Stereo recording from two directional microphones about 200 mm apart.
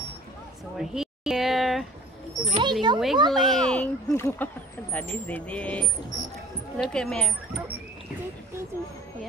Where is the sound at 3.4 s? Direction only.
20° right (ahead or behind).